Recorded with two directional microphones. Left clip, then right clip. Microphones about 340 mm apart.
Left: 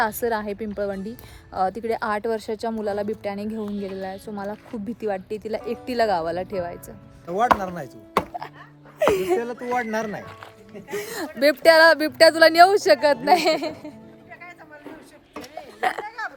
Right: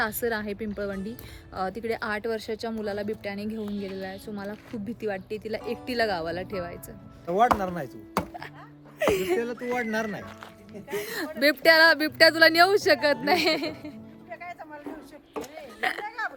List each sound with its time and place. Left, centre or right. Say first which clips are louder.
0.0 s speech: left 5 dB; centre
7.6 s chopping: left 1 dB; centre
8.2 s music: left 6 dB; left
9.1 s speech: left 4 dB; centre
10.8 s speech: left 2 dB; centre
15.5 s a sound: left 5 dB; centre
16.0 s burping: left 1 dB; centre